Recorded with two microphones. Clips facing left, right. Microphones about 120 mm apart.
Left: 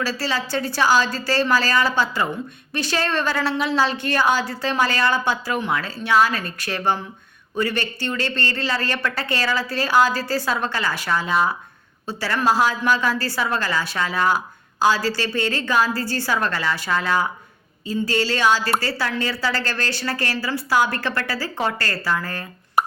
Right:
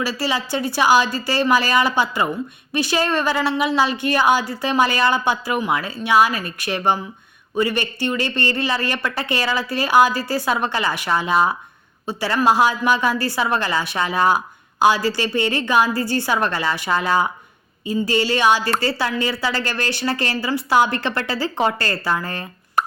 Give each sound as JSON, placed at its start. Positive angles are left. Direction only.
{"t": 0.0, "sound": "a woman's voice", "side_deg": -15}